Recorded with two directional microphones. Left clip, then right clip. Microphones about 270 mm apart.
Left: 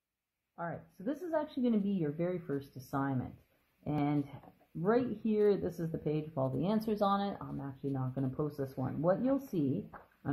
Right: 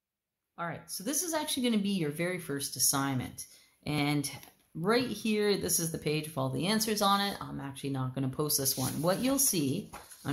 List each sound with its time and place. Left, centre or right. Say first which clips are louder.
0.6 s speech: right 4 dB; right